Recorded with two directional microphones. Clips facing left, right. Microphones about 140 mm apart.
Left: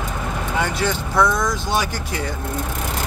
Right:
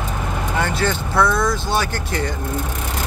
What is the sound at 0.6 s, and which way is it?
Speech, 15° left (ahead or behind).